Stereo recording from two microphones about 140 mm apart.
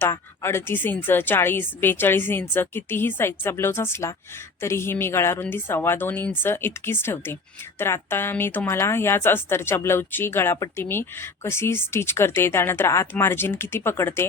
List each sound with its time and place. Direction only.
0.0 s speech: 15° left (ahead or behind)